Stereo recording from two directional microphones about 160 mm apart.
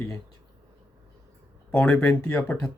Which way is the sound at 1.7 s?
10° left (ahead or behind).